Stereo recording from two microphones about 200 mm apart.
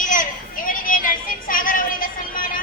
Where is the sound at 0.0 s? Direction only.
40° left (ahead or behind).